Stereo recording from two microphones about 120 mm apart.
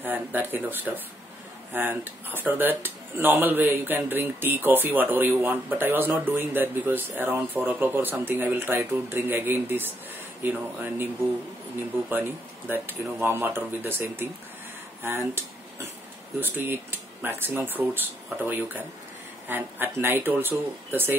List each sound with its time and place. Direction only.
0.0 s speech: 15° right (ahead or behind)
12.1 s speech: 15° right (ahead or behind)